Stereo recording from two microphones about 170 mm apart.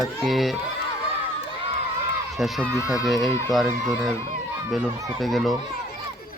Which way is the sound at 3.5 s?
Centre (ahead or behind).